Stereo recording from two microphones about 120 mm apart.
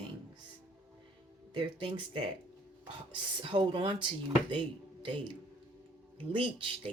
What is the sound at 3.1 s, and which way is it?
Speech, 45° right (ahead or behind).